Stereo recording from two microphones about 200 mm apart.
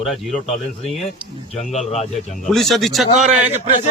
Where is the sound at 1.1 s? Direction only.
35° left (ahead or behind).